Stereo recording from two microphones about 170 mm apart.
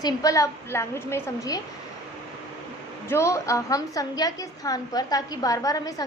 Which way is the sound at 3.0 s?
15° left (ahead or behind).